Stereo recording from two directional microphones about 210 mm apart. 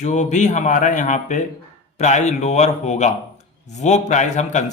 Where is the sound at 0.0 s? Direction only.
35° left (ahead or behind).